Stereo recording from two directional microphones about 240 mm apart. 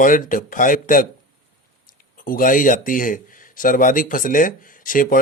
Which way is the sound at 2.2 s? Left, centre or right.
Left.